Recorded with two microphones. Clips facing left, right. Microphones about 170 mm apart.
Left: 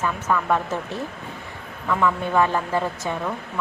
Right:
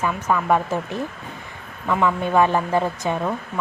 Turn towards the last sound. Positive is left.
turn(degrees=-15)  # may be behind; listen again after turning